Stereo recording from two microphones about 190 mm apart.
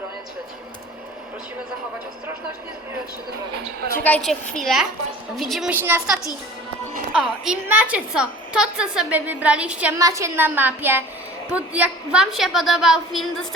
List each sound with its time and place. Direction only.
4.0 s a woman's voice: 5° left (ahead or behind)